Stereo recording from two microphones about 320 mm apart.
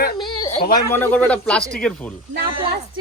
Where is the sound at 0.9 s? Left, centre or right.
Centre.